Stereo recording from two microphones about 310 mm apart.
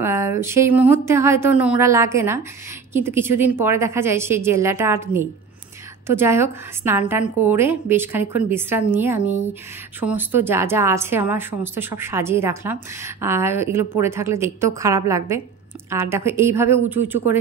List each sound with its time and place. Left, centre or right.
0.0 s a woman's voice: centre